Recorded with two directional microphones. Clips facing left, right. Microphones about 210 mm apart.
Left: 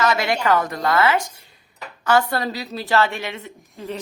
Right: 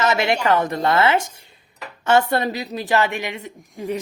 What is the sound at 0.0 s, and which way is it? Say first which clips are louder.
A woman's voice: right 1 dB; 25° right (ahead or behind).